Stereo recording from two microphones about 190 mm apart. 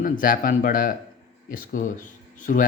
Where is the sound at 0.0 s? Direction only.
45° left (ahead or behind).